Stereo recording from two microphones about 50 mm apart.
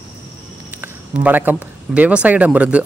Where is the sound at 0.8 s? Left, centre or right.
Right.